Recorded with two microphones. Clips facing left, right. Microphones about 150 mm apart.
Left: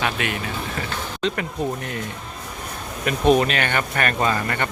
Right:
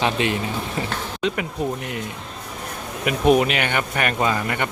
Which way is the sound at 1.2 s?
10° right (ahead or behind).